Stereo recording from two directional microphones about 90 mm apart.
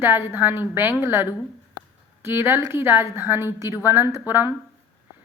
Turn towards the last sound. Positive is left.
turn(degrees=-25)  # may be behind; listen again after turning